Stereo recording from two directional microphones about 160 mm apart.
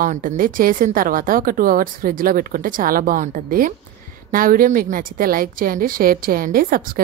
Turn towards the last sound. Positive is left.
turn(degrees=-65)  # may be behind; listen again after turning